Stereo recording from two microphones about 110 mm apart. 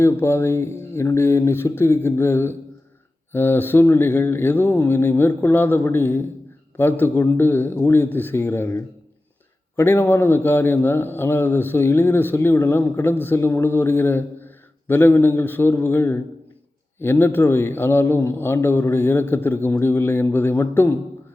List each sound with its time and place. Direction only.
0.0 s a man's voice: 25° left (ahead or behind)